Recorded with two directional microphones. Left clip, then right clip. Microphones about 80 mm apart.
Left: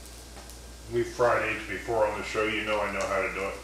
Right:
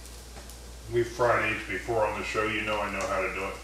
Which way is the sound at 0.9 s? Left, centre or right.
Centre.